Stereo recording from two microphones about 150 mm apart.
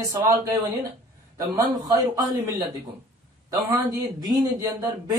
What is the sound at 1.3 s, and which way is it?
Speech, 25° right (ahead or behind).